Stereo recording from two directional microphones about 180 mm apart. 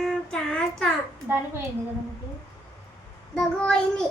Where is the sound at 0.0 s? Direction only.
5° left (ahead or behind).